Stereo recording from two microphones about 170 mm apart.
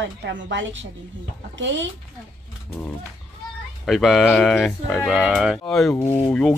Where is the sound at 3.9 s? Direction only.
Centre (ahead or behind).